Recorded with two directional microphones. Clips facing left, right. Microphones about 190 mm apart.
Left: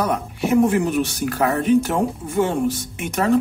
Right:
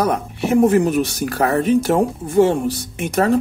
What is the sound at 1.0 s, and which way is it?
Speech, 40° right (ahead or behind).